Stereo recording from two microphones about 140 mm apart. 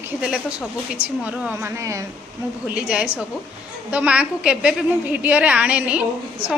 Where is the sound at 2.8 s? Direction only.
10° right (ahead or behind).